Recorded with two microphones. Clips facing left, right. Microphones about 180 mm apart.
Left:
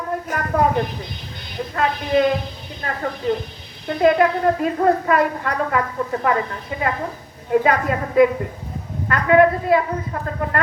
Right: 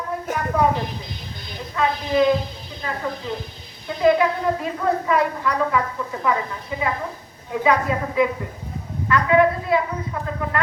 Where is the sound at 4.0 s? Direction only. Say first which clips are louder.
Left 2 dB; 55° left (ahead or behind).